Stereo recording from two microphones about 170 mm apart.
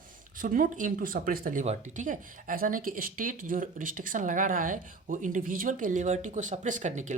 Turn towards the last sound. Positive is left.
turn(degrees=-45)  # may be behind; listen again after turning